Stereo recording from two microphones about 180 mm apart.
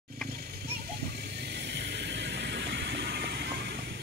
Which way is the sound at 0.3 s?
60° right (ahead or behind).